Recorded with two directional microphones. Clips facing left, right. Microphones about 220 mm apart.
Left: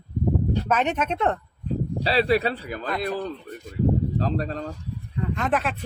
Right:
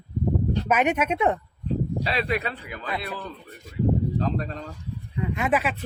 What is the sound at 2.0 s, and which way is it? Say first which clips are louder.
Speech: left 5 dB; 30° left (ahead or behind).